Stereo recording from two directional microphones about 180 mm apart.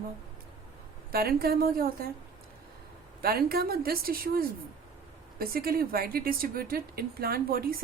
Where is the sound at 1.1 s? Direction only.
55° right (ahead or behind).